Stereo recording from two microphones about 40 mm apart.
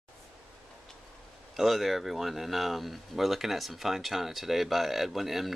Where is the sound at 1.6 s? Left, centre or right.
Centre.